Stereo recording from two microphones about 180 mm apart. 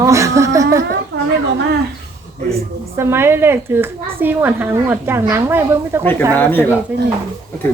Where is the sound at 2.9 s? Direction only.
15° right (ahead or behind).